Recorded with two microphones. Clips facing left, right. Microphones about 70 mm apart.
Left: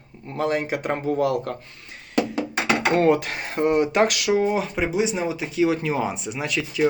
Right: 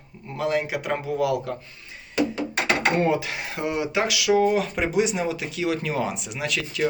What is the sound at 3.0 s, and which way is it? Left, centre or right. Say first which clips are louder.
Speech: left 7 dB; left.